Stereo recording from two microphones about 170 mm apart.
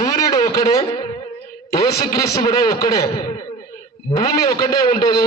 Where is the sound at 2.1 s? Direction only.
20° left (ahead or behind).